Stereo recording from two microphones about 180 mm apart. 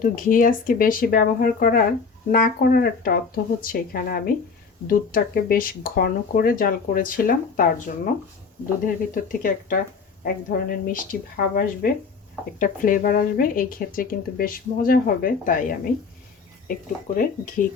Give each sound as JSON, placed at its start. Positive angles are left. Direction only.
{"t": 0.0, "sound": "speech", "side_deg": 50}
{"t": 9.1, "sound": "a woman's voice", "side_deg": 50}
{"t": 17.2, "sound": "speech", "side_deg": 50}